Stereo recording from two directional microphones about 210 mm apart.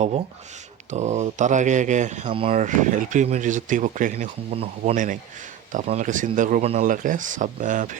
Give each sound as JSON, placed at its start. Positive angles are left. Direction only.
{"t": 0.9, "sound": "speech", "side_deg": -35}